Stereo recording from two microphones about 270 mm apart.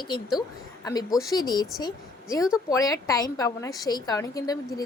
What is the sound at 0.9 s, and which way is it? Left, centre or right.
Speech, centre.